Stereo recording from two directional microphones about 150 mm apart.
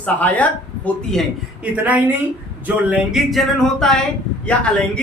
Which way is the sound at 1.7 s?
10° right (ahead or behind).